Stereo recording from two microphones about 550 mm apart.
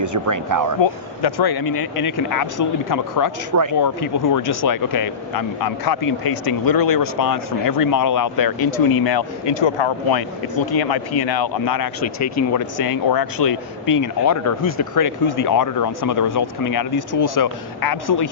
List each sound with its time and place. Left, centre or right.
0.0 s speech: right
0.8 s speech: left